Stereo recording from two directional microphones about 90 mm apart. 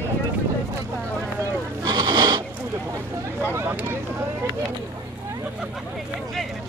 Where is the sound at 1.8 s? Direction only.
50° right (ahead or behind).